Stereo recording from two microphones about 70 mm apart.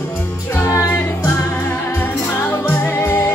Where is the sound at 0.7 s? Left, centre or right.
Left.